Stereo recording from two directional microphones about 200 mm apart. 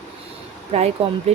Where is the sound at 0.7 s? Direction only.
30° right (ahead or behind).